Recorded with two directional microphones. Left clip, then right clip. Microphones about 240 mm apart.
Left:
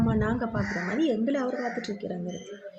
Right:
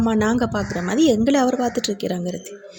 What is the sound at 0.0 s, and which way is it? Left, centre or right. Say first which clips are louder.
A woman's voice: right 8 dB; right.